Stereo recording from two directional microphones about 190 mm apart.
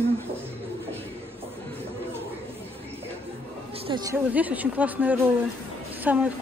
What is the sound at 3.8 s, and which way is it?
Speech, 25° right (ahead or behind).